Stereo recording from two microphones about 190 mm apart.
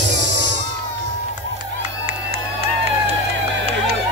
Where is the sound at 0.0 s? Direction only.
70° right (ahead or behind).